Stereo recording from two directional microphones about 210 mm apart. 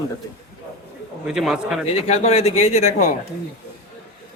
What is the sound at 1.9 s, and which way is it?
Speech, 30° left (ahead or behind).